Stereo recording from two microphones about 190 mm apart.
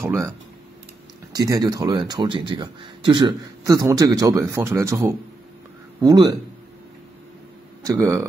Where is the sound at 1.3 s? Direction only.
20° right (ahead or behind).